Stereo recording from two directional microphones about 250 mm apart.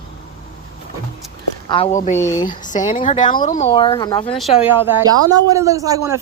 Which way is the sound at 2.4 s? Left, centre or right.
Left.